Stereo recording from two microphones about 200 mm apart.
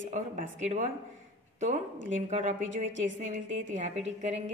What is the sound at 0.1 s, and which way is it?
Speech, 40° right (ahead or behind).